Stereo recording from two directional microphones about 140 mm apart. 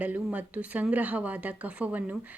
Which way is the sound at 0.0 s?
10° right (ahead or behind).